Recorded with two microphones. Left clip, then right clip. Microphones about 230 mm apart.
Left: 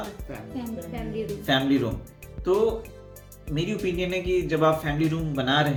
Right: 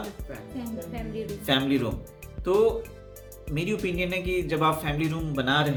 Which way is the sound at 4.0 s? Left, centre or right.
Right.